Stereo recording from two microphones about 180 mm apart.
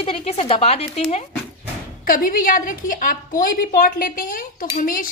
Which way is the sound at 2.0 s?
50° left (ahead or behind).